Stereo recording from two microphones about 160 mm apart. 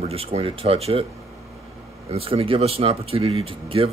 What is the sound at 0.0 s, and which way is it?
Speech, 40° right (ahead or behind).